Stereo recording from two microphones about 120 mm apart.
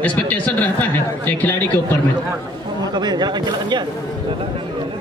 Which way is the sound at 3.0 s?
35° right (ahead or behind).